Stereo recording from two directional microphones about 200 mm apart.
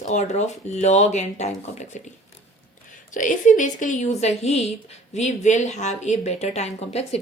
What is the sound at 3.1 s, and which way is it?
Speech, 40° left (ahead or behind).